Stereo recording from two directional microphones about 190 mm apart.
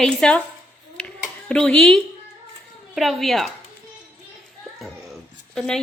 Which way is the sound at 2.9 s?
Centre (ahead or behind).